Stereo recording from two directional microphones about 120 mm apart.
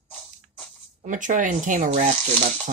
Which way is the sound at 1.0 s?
90° right.